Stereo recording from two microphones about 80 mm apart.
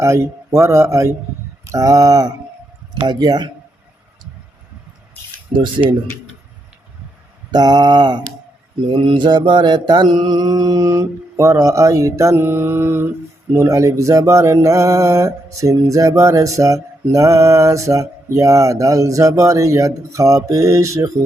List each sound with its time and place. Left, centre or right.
0.0 s speech: right
1.6 s mantra: right
3.1 s mantra: right
5.8 s speech: right
7.5 s mantra: right
8.9 s mantra: right
13.5 s speech: right